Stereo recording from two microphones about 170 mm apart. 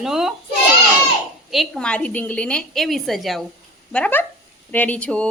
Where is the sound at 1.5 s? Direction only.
Centre (ahead or behind).